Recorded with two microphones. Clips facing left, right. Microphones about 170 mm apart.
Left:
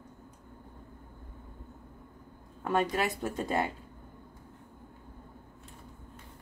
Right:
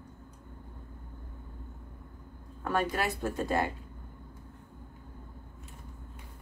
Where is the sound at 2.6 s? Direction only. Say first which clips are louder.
Left 1 dB; 20° left (ahead or behind).